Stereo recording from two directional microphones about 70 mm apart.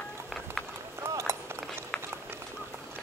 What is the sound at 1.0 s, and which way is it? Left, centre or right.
Run, right.